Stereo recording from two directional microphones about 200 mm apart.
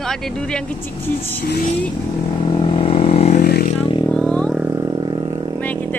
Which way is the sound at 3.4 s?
50° left (ahead or behind).